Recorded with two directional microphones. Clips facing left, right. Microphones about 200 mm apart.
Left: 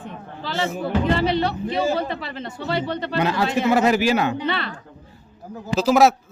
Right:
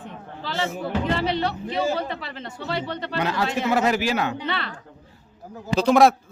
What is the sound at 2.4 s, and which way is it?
Speech, 40° left (ahead or behind).